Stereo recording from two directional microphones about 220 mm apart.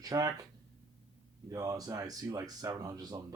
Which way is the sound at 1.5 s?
15° right (ahead or behind).